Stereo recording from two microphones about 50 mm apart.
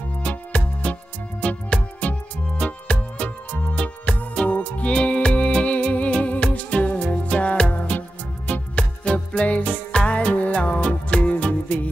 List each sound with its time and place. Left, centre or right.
0.2 s music: left